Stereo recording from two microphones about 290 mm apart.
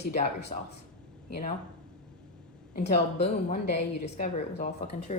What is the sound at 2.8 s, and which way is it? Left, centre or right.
Speech, left.